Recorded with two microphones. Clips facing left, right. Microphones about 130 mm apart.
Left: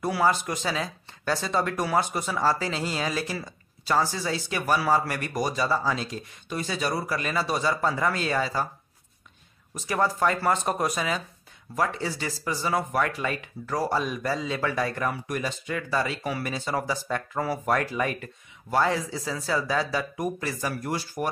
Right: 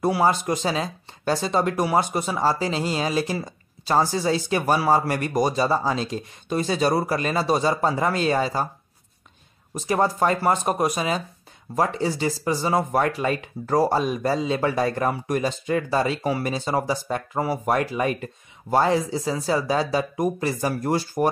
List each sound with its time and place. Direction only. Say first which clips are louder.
0.0 s speech: right 4 dB; 25° right (ahead or behind)
9.8 s speech: right 4 dB; 25° right (ahead or behind)